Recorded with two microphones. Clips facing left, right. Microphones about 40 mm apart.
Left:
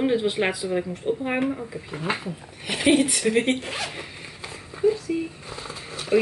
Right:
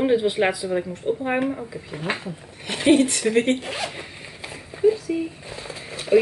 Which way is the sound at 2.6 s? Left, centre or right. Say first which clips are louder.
Right 2 dB; centre.